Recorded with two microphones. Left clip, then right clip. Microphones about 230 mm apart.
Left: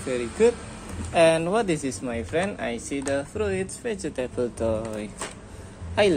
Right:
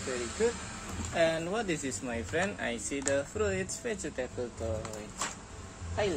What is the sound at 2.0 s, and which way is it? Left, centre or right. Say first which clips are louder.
Speech: left 6 dB; centre.